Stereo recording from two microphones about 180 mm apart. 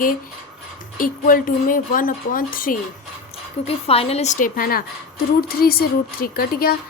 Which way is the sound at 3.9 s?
35° left (ahead or behind).